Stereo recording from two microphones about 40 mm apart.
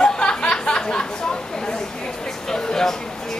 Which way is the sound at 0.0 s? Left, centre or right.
Left.